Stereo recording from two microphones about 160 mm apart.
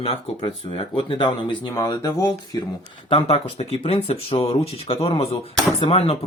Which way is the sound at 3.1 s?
35° left (ahead or behind).